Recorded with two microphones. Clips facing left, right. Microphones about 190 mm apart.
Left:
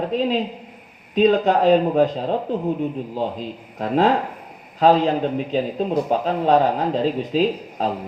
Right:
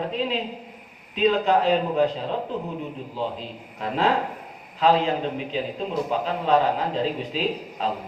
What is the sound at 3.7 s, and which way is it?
Speech, 40° left (ahead or behind).